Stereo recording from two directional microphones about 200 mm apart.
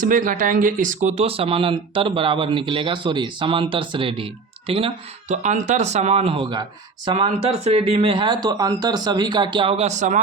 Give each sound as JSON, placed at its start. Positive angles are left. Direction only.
{"t": 0.0, "sound": "speech", "side_deg": -40}